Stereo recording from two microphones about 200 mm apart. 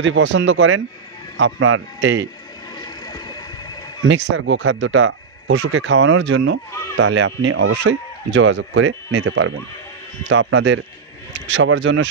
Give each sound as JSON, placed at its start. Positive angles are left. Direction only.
{"t": 0.0, "sound": "speech", "side_deg": -65}
{"t": 2.8, "sound": "a sound", "side_deg": 20}
{"t": 4.0, "sound": "a man's voice", "side_deg": -70}